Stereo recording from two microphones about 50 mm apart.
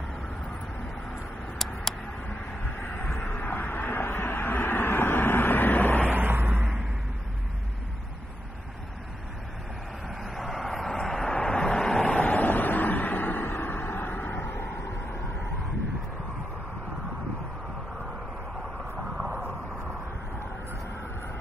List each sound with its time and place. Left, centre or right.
3.3 s vehicle: left
6.0 s vehicle: right
10.0 s vehicle: centre
12.2 s vehicle: left
18.9 s a sound: centre